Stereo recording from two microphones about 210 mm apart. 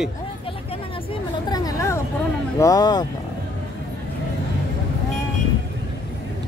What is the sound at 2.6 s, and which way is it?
Speech, 15° left (ahead or behind).